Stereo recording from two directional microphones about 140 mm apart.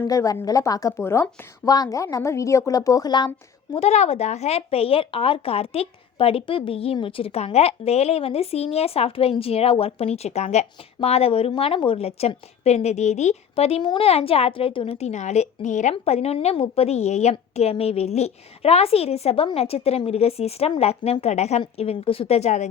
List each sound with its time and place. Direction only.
0.1 s a woman's voice: 25° left (ahead or behind)
3.8 s speech: 50° left (ahead or behind)
13.8 s a woman's voice: 35° left (ahead or behind)
14.1 s speech: 45° left (ahead or behind)